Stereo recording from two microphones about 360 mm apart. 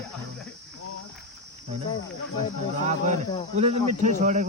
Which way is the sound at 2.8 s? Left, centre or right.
Centre.